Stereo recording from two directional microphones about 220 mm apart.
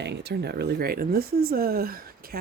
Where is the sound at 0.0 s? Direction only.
50° right (ahead or behind).